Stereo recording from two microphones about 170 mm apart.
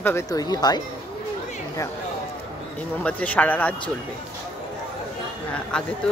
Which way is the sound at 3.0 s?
10° left (ahead or behind).